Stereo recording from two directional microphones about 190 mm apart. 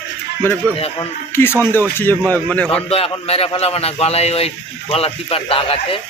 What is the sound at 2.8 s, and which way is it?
Speech, 30° left (ahead or behind).